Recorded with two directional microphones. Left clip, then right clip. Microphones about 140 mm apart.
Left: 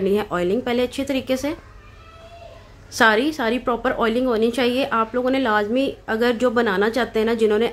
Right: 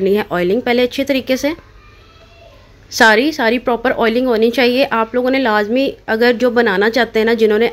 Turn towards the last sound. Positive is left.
turn(degrees=-25)  # may be behind; listen again after turning